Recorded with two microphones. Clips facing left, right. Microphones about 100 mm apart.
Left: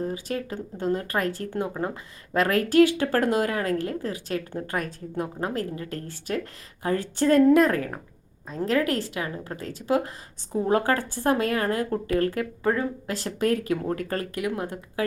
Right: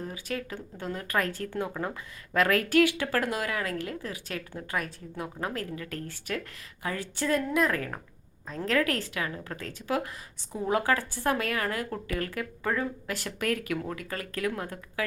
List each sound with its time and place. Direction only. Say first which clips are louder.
0.0 s a woman's voice: left 6 dB; 30° left (ahead or behind)
6.8 s a woman's voice: left 8 dB; 40° left (ahead or behind)
8.4 s a woman's voice: left 3 dB; 20° left (ahead or behind)
10.7 s a woman's voice: left 3 dB; 40° left (ahead or behind)
11.3 s speech: left 5 dB; 30° left (ahead or behind)
13.9 s speech: left 8 dB; 45° left (ahead or behind)
14.3 s speech: left 3 dB; 20° left (ahead or behind)